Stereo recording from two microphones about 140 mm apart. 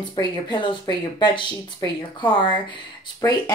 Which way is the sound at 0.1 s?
30° left (ahead or behind).